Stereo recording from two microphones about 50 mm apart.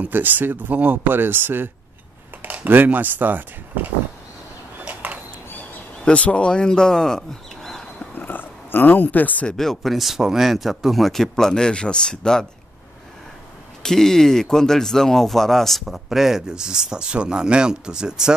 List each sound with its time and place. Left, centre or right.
0.1 s speech: right
2.4 s speech: right
4.8 s a sound: right
6.0 s speech: left; by 7.8 s centre
8.1 s a sound: left
9.6 s speech: centre
13.8 s speech: centre